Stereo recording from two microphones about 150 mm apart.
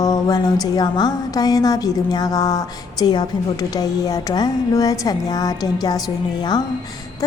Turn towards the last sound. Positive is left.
turn(degrees=25)  # may be behind; listen again after turning